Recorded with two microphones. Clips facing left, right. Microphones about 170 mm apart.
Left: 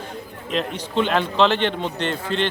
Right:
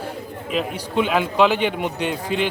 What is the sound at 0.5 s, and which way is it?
A man's voice, 5° right (ahead or behind).